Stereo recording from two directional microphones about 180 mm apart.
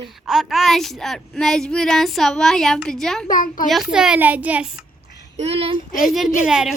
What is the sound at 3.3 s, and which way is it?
Speech, 50° left (ahead or behind).